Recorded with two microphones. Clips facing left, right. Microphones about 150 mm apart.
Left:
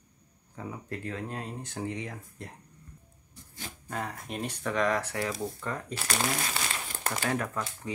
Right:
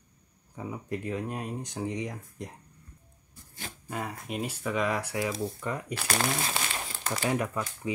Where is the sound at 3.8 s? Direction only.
5° right (ahead or behind).